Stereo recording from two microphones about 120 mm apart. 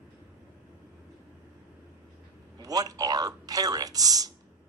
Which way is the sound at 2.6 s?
30° right (ahead or behind).